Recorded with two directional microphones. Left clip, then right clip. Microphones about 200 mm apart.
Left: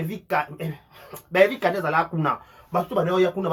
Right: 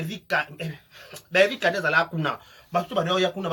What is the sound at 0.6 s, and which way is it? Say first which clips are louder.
Speech: left 1 dB; 5° right (ahead or behind).